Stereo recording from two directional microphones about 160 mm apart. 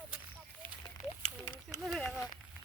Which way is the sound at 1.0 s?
45° left (ahead or behind).